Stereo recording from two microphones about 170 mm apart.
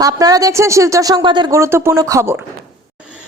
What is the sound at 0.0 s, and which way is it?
Speech, 20° right (ahead or behind).